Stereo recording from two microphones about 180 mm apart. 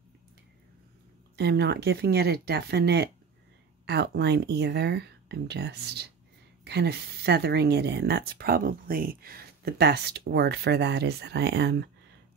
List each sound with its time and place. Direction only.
1.3 s speech: 65° right (ahead or behind)